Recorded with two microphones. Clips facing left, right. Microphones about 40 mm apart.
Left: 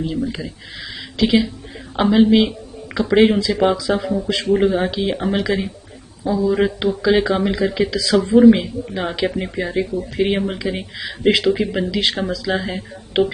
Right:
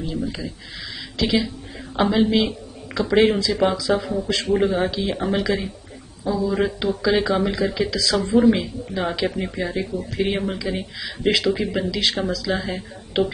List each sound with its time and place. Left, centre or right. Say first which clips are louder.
0.2 s a woman's voice: left 3 dB; centre
2.4 s a sound: left 3 dB; centre
3.3 s speech: left 3 dB; centre
4.0 s speech: left 3 dB; centre
7.2 s speech: left 2 dB; left
7.5 s speech: left 3 dB; centre
11.2 s speech: left 4 dB; centre